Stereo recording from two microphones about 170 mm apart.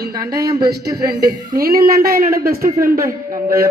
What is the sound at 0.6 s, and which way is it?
A man's voice, 65° right (ahead or behind).